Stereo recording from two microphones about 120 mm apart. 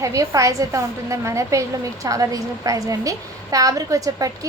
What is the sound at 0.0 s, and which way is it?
A woman's voice, 25° right (ahead or behind).